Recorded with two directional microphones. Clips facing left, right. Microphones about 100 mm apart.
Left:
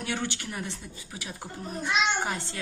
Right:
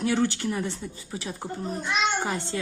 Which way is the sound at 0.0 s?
35° right (ahead or behind).